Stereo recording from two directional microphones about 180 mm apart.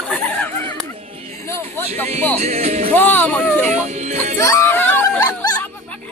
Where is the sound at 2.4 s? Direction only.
35° right (ahead or behind).